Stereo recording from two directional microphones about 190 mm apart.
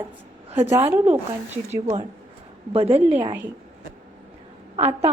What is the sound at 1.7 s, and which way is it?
A woman's voice, 35° right (ahead or behind).